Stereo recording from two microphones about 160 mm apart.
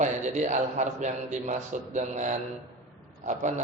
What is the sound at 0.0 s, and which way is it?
A man's voice, 50° right (ahead or behind).